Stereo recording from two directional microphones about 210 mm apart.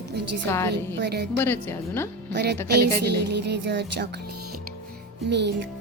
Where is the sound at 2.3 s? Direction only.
55° right (ahead or behind).